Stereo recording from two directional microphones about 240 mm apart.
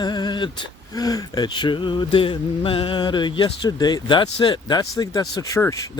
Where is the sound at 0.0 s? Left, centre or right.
Centre.